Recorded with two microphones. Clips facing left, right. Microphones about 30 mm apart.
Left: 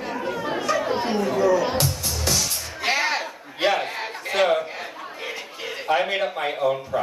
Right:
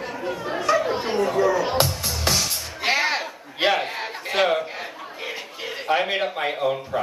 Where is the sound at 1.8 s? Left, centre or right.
Right.